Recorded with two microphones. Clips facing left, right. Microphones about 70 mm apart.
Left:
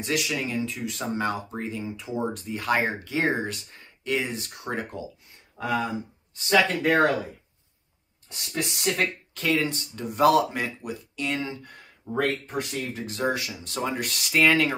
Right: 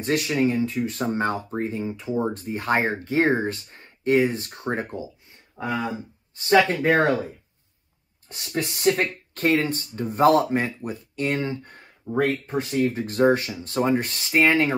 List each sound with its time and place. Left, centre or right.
0.0 s speech: right
8.3 s speech: right
12.2 s speech: right
12.9 s speech: right